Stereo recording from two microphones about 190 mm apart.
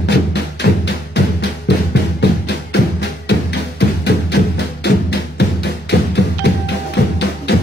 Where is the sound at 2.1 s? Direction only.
65° left (ahead or behind).